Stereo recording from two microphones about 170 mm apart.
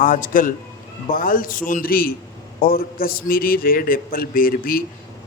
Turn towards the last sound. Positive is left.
turn(degrees=60)  # may be behind; listen again after turning